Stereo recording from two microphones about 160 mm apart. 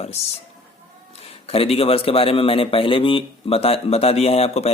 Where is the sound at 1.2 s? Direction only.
40° left (ahead or behind).